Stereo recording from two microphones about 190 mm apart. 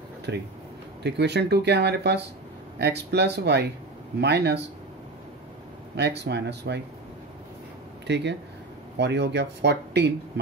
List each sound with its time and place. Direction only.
0.3 s speech: 65° right (ahead or behind)
5.9 s speech: 60° right (ahead or behind)
8.1 s speech: 65° right (ahead or behind)